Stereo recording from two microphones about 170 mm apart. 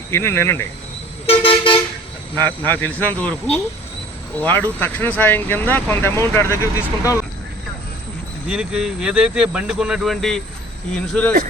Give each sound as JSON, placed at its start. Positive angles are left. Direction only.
{"t": 0.1, "sound": "speech", "side_deg": 15}
{"t": 1.3, "sound": "toot", "side_deg": 30}
{"t": 2.6, "sound": "speech", "side_deg": 10}
{"t": 4.4, "sound": "speech", "side_deg": 10}
{"t": 8.4, "sound": "speech", "side_deg": -5}